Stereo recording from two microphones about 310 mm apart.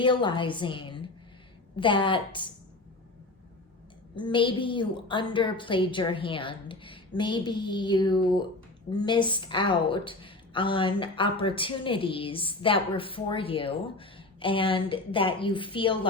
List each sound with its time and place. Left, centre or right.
0.0 s a woman's voice: centre
4.1 s a woman's voice: centre